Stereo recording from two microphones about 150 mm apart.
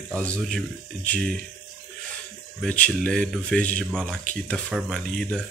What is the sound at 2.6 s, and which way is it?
Speech, 10° left (ahead or behind).